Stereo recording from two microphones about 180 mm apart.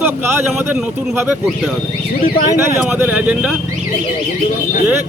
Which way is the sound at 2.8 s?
10° right (ahead or behind).